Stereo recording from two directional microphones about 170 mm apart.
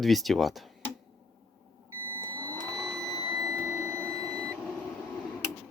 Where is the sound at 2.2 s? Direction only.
25° right (ahead or behind).